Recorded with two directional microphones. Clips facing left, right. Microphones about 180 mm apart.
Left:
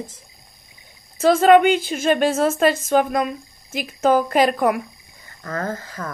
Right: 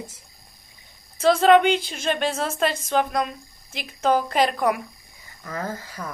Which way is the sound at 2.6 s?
50° left (ahead or behind).